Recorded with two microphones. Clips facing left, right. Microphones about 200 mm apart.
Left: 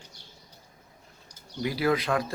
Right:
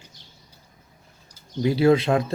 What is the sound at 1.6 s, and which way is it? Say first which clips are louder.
Speech: right 8 dB; 25° right (ahead or behind).